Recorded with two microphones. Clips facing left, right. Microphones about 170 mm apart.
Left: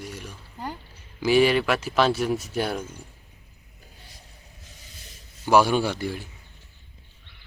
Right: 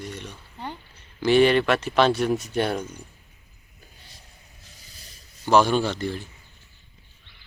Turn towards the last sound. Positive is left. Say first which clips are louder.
# even
turn(degrees=10)  # may be behind; listen again after turning